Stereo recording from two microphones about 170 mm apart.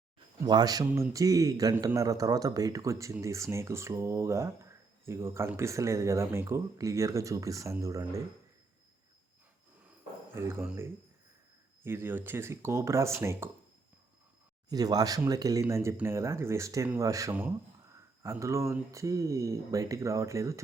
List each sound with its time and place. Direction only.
0.4 s a man's voice: 25° right (ahead or behind)
10.3 s a man's voice: 15° right (ahead or behind)
14.7 s a man's voice: 20° right (ahead or behind)